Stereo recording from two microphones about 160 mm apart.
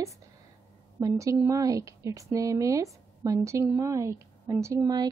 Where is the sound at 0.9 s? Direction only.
20° right (ahead or behind).